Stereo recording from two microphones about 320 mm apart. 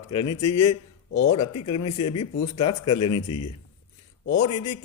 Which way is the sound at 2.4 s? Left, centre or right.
Left.